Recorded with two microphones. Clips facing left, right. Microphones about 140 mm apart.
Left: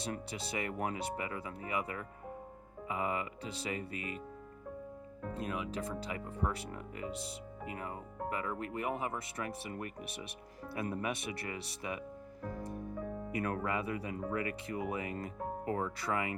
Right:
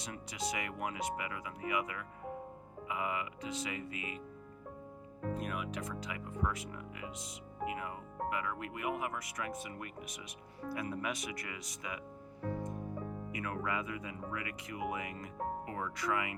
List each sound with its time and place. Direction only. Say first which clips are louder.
0.3 s speech: even; 30° left (ahead or behind)
5.3 s speech: left 1 dB; 30° left (ahead or behind)
13.3 s speech: left 3 dB; 40° left (ahead or behind)